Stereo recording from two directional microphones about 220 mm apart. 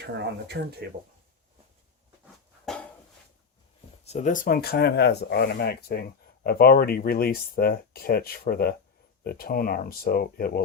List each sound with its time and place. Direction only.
0.0 s speech: 50° right (ahead or behind)
2.7 s a sound: centre (ahead or behind)
4.0 s speech: 30° left (ahead or behind)